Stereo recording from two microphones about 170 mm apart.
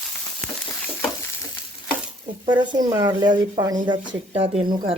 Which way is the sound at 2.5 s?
25° right (ahead or behind).